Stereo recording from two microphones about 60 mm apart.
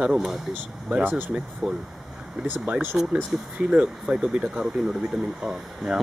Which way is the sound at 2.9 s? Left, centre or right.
Centre.